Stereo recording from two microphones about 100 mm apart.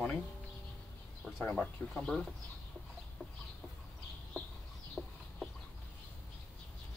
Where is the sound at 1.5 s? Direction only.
5° left (ahead or behind).